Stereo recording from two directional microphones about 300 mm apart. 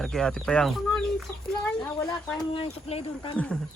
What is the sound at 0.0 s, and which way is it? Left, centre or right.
Speech, centre.